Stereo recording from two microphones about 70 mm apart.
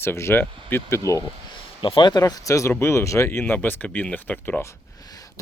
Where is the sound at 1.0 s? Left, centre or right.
Left.